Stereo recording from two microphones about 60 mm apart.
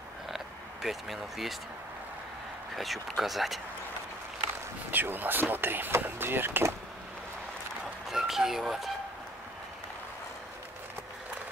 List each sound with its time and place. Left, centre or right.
0.8 s speech: centre
2.7 s speech: centre
4.9 s speech: right
8.1 s speech: centre